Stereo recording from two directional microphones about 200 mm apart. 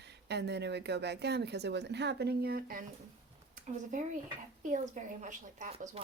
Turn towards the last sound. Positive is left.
turn(degrees=-35)  # may be behind; listen again after turning